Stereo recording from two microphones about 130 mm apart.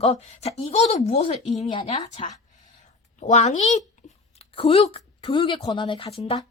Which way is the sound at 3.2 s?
65° left (ahead or behind).